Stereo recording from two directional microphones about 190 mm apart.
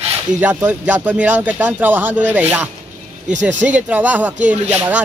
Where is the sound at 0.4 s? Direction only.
10° right (ahead or behind).